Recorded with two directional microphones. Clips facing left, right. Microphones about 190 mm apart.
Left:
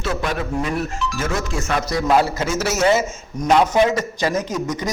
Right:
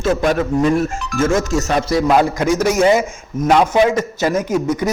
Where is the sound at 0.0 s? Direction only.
45° right (ahead or behind).